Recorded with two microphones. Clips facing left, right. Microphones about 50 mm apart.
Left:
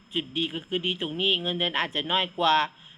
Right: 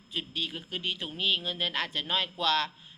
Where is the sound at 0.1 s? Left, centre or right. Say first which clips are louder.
Left 5 dB; left.